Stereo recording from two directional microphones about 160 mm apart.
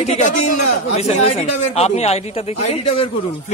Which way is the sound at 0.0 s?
50° left (ahead or behind).